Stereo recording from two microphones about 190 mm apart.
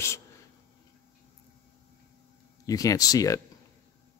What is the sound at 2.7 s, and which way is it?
Speech, 20° left (ahead or behind).